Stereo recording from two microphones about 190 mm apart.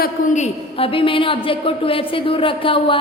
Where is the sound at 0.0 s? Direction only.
35° left (ahead or behind).